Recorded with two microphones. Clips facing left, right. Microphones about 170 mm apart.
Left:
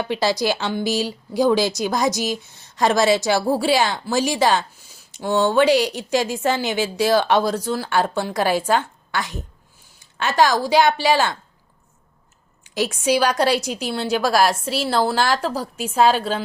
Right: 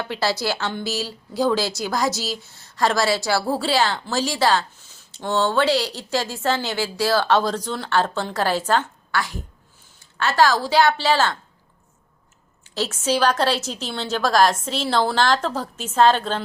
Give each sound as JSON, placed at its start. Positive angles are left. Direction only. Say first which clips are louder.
{"t": 0.0, "sound": "a woman's voice", "louder": "left 3 dB", "side_deg": 15}
{"t": 12.6, "sound": "a woman's voice", "louder": "left 3 dB", "side_deg": 15}